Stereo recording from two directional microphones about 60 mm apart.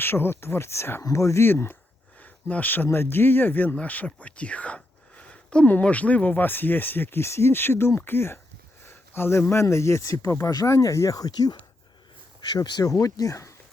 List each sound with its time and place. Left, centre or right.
0.0 s speech: left
1.0 s speech: left
1.5 s speech: left
12.5 s speech: left